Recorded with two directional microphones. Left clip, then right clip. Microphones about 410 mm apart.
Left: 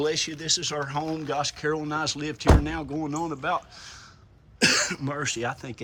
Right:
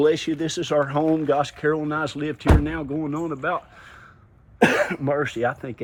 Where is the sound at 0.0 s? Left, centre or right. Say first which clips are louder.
Right 7 dB; centre.